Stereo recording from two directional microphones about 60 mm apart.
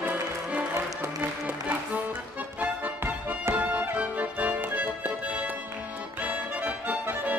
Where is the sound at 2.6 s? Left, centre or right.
Right.